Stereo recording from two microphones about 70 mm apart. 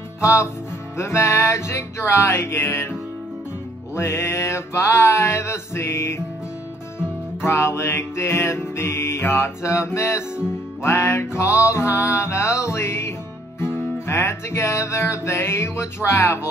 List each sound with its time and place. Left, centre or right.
0.2 s music: left
7.4 s music: left